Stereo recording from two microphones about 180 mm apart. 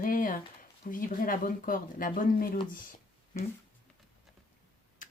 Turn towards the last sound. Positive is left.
turn(degrees=45)  # may be behind; listen again after turning